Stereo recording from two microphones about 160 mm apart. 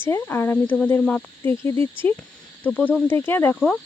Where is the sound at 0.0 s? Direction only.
15° left (ahead or behind).